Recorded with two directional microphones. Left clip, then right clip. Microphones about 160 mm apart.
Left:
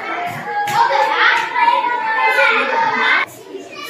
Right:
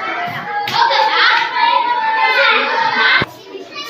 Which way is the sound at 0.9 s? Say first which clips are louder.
Right 2 dB; 25° left (ahead or behind).